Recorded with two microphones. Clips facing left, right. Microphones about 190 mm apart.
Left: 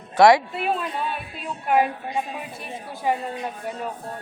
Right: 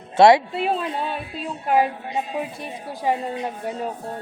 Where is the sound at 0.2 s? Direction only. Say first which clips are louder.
Right 2 dB; 25° right (ahead or behind).